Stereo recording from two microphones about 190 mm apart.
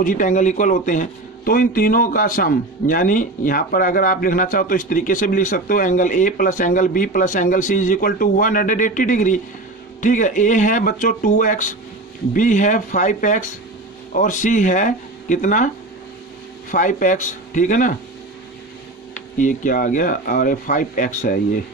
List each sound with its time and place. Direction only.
0.0 s a man's voice: 45° left (ahead or behind)
16.7 s a man's voice: 40° left (ahead or behind)
19.3 s a man's voice: 45° left (ahead or behind)